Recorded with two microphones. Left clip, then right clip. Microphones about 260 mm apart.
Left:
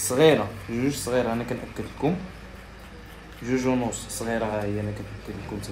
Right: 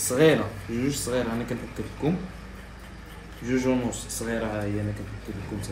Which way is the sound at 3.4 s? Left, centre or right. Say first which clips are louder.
Left 1 dB; left.